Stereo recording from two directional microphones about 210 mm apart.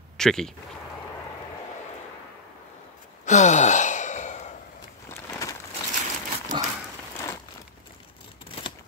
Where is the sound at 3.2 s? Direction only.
35° left (ahead or behind).